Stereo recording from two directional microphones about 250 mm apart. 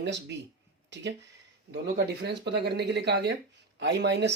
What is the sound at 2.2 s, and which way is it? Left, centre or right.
Speech, right.